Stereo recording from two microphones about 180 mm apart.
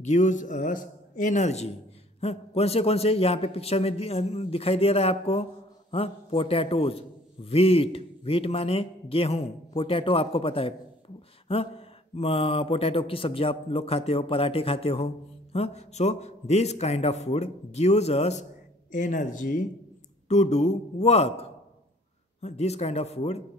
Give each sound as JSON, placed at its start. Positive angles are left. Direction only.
{"t": 0.0, "sound": "a man's voice", "side_deg": 40}
{"t": 12.2, "sound": "a man's voice", "side_deg": 30}